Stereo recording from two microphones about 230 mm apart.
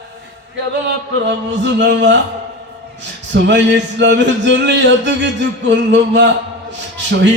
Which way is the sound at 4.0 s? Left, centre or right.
Right.